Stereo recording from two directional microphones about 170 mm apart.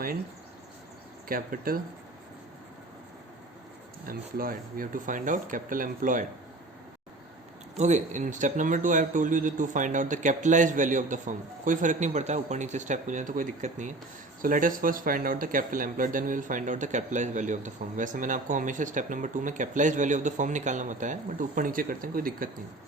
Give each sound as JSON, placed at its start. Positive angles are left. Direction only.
{"t": 1.3, "sound": "speech", "side_deg": -55}
{"t": 4.0, "sound": "speech", "side_deg": -60}
{"t": 7.8, "sound": "speech", "side_deg": -45}